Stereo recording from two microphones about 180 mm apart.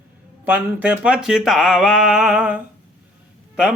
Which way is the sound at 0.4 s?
10° right (ahead or behind).